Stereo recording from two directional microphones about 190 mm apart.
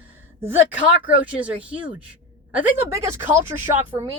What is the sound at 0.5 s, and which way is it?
Speech, 10° right (ahead or behind).